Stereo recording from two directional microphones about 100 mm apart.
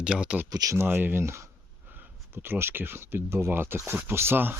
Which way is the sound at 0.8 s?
20° right (ahead or behind).